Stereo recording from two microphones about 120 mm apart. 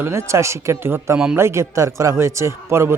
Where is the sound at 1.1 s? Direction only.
5° right (ahead or behind).